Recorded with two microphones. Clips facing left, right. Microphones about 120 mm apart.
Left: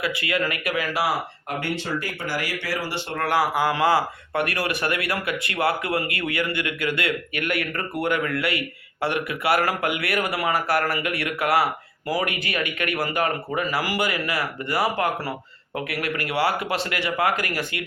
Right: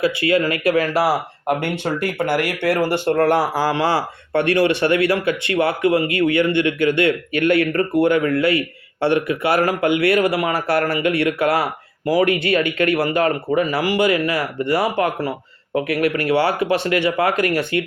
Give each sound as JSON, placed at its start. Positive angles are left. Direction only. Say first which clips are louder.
{"t": 0.0, "sound": "speech", "louder": "right 8 dB", "side_deg": -30}
{"t": 1.5, "sound": "speech", "louder": "right 8 dB", "side_deg": -55}